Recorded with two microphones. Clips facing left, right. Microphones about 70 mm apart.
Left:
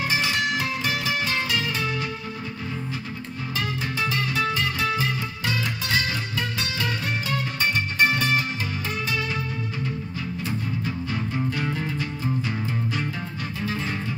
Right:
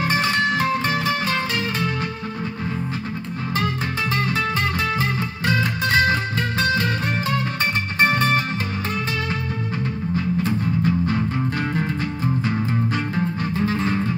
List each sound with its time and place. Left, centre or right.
0.0 s music: right
4.1 s music: right
8.0 s music: right
10.1 s music: right
13.1 s music: right